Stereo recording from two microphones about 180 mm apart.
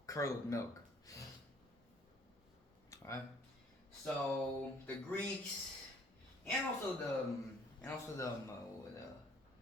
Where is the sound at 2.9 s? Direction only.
15° left (ahead or behind).